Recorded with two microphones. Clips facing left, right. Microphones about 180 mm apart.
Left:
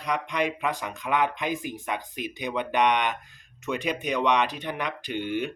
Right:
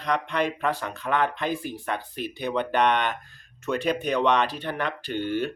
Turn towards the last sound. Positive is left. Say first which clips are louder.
# right 2 dB
turn(degrees=15)  # may be behind; listen again after turning